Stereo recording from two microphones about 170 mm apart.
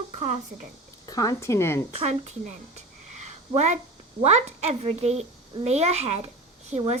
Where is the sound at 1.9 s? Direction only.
35° right (ahead or behind).